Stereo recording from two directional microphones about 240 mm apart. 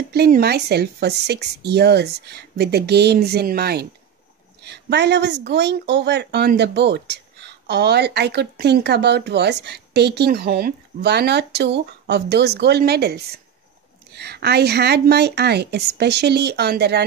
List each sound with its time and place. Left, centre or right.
0.1 s speech: right